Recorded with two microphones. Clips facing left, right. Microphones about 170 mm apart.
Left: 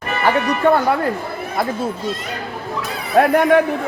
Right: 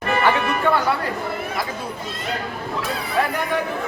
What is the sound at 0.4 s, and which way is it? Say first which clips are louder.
Speech: left 5 dB; 45° left (ahead or behind).